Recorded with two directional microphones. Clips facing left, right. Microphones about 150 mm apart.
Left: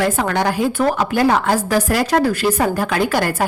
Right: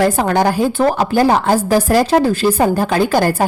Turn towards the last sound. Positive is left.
turn(degrees=-30)  # may be behind; listen again after turning